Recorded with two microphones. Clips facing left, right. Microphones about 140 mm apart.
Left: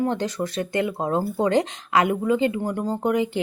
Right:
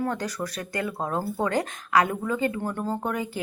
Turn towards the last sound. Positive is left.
turn(degrees=20)  # may be behind; listen again after turning